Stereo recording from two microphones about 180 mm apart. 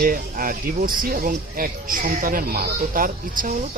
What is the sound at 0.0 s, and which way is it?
Speech, 50° right (ahead or behind).